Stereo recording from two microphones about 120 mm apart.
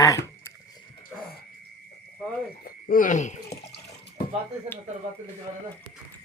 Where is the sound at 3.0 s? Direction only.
85° left.